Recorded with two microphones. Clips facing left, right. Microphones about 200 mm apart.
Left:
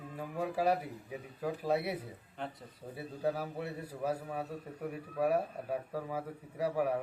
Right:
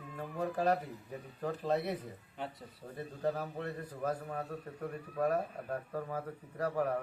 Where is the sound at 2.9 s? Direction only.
10° left (ahead or behind).